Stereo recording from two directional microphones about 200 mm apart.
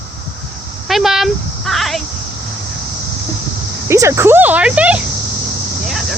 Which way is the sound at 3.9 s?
15° right (ahead or behind).